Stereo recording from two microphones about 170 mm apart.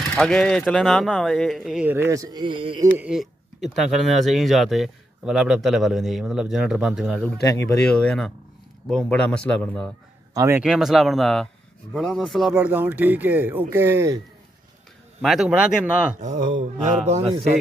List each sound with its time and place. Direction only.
0.1 s speech: 5° left (ahead or behind); by 2.8 s 30° right (ahead or behind)
2.8 s a man's voice: 5° right (ahead or behind)
10.3 s a man's voice: 15° right (ahead or behind)
10.6 s speech: centre (ahead or behind)
12.5 s speech: 10° right (ahead or behind)
15.2 s speech: 5° right (ahead or behind)
16.2 s mantra: 45° right (ahead or behind)